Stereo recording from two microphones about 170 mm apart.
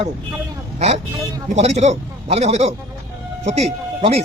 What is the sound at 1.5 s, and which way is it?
Speech, 40° right (ahead or behind).